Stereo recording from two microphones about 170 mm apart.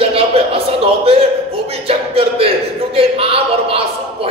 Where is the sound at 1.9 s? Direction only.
35° right (ahead or behind).